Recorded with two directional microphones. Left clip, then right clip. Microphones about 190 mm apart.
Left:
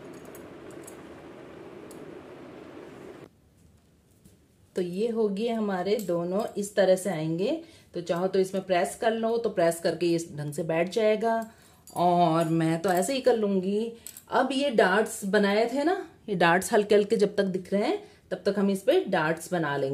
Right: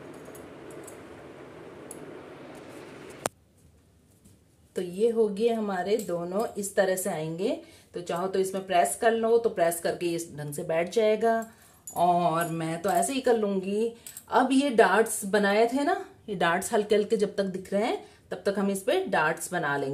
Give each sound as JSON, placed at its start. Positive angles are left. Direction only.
{"t": 4.7, "sound": "speech", "side_deg": 25}
{"t": 11.9, "sound": "a woman's voice", "side_deg": 45}